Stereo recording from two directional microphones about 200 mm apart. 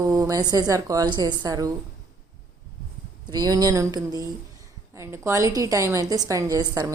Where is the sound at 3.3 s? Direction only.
20° right (ahead or behind).